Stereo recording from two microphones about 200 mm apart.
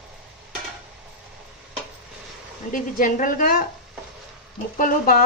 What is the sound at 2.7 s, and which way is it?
Speech, 40° left (ahead or behind).